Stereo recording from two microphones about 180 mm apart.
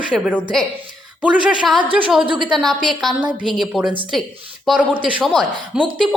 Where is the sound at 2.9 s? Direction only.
Centre (ahead or behind).